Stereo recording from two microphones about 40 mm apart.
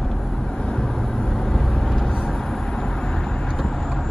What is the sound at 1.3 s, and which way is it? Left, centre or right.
Vehicle, centre.